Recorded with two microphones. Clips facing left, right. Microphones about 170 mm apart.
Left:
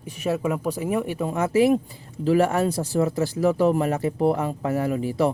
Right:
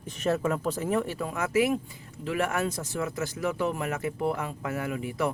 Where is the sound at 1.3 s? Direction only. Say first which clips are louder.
Left 7 dB; 30° left (ahead or behind).